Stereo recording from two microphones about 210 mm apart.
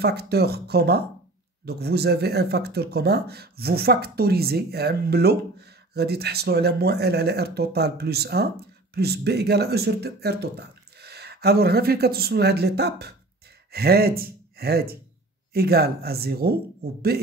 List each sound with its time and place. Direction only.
0.0 s speech: 50° right (ahead or behind)